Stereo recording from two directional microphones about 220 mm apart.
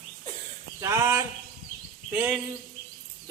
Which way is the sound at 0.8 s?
15° right (ahead or behind).